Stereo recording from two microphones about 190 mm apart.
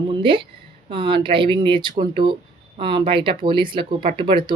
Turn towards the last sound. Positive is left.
turn(degrees=-25)  # may be behind; listen again after turning